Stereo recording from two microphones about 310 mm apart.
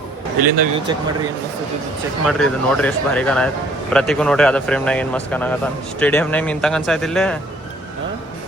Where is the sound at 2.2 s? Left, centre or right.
Centre.